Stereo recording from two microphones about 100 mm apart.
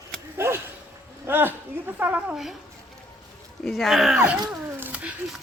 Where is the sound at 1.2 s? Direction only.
20° right (ahead or behind).